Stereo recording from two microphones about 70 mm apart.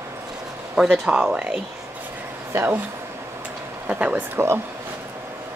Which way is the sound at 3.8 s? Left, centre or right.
Right.